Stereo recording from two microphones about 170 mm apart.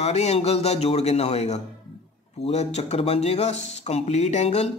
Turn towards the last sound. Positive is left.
turn(degrees=40)  # may be behind; listen again after turning